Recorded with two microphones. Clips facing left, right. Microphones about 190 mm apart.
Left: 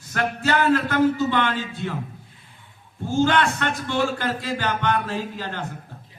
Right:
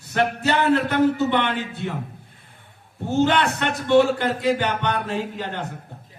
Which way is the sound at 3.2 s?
20° right (ahead or behind).